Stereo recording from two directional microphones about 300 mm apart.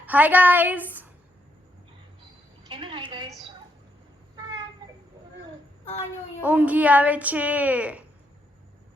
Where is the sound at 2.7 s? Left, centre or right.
Centre.